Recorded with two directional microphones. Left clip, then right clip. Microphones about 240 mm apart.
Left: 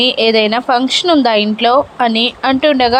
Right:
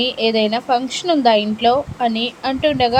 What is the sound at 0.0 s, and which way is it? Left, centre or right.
Speech, centre.